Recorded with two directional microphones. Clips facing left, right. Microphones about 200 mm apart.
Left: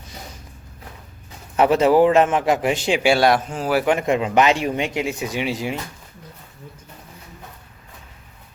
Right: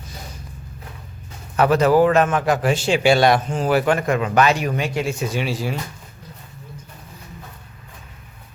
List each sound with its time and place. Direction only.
1.5 s a man's voice: 25° left (ahead or behind); by 3.8 s 5° left (ahead or behind)
3.8 s a man's voice: 20° left (ahead or behind)